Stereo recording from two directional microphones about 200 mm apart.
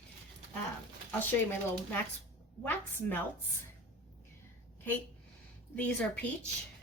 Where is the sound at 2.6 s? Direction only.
10° left (ahead or behind).